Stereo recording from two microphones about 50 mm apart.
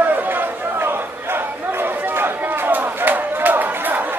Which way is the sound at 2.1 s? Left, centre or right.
Right.